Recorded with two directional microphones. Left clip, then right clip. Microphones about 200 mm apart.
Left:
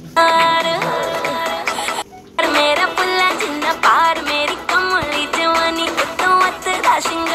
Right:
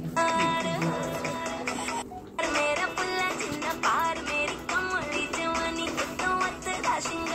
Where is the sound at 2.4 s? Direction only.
40° left (ahead or behind).